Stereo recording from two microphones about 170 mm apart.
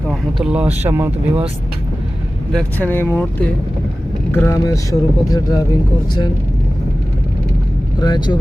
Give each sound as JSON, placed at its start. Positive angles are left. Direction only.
{"t": 0.1, "sound": "speech", "side_deg": -5}
{"t": 2.5, "sound": "speech", "side_deg": 5}
{"t": 7.9, "sound": "speech", "side_deg": 25}